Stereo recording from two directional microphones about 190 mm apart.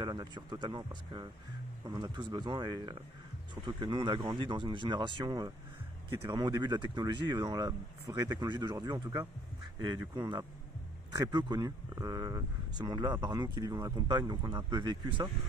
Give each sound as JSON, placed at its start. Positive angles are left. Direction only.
{"t": 0.0, "sound": "speech", "side_deg": -20}